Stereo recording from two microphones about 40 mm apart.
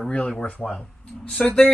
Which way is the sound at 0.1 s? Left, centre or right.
Left.